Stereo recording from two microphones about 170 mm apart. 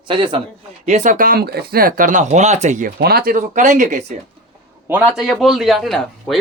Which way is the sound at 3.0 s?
65° right (ahead or behind).